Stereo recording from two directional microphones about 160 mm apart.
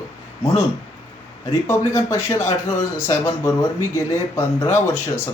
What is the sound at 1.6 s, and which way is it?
A man's voice, 20° left (ahead or behind).